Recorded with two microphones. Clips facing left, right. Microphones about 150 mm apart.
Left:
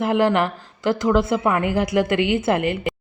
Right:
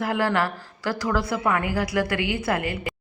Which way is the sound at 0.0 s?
20° left (ahead or behind).